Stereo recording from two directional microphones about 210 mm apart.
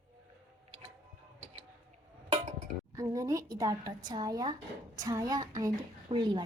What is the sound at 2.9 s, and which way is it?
A woman's voice, 15° right (ahead or behind).